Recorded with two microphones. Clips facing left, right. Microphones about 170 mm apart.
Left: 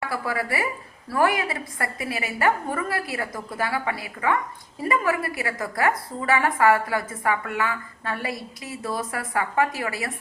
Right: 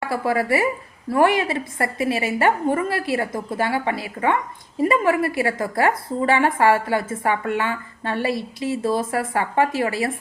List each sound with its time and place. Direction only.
0.1 s a woman's voice: 25° right (ahead or behind)